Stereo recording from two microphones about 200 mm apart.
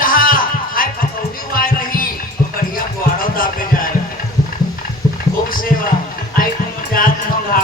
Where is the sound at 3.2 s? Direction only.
45° left (ahead or behind).